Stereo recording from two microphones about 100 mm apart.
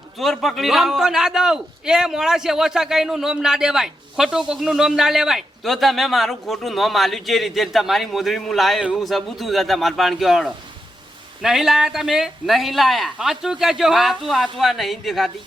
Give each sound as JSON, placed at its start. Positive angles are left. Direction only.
{"t": 0.2, "sound": "a man's voice", "side_deg": 0}